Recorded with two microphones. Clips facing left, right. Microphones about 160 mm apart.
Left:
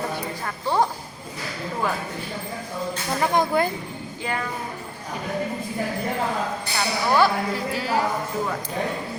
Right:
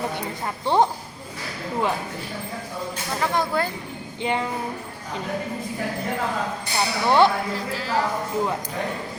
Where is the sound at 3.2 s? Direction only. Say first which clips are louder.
Left 3 dB; 15° left (ahead or behind).